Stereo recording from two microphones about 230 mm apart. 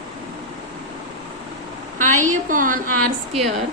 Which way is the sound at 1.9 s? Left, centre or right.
Right.